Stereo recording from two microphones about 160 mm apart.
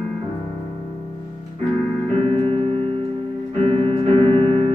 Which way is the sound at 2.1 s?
40° right (ahead or behind).